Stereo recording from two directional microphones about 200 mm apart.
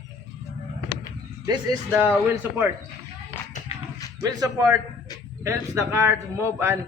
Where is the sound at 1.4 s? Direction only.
20° right (ahead or behind).